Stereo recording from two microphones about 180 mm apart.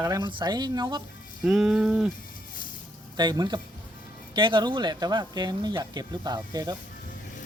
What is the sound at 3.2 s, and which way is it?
Speech, 25° right (ahead or behind).